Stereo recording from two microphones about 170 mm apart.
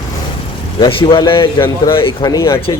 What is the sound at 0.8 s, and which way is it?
Speech, 25° left (ahead or behind).